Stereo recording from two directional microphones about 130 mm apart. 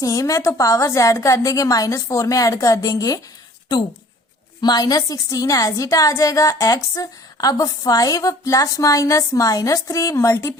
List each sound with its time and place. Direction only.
0.0 s a woman's voice: 25° left (ahead or behind)
4.6 s a woman's voice: 30° left (ahead or behind)